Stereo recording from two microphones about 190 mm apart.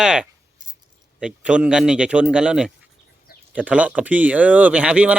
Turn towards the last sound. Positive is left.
turn(degrees=-5)  # may be behind; listen again after turning